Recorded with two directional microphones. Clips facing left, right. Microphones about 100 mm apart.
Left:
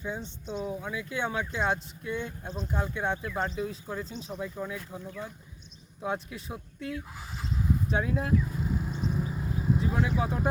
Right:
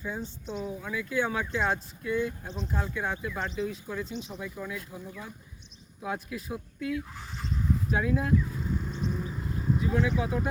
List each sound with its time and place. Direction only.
0.5 s speech: 25° left (ahead or behind)
3.3 s speech: 35° left (ahead or behind)
6.0 s speech: 25° left (ahead or behind)
8.4 s vehicle: 10° left (ahead or behind)
9.7 s speech: 30° left (ahead or behind)